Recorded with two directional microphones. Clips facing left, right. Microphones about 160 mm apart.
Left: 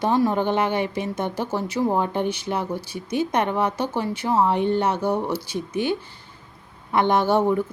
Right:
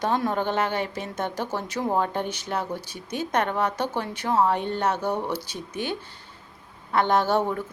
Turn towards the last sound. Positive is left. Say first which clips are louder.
# left 3 dB
turn(degrees=10)  # may be behind; listen again after turning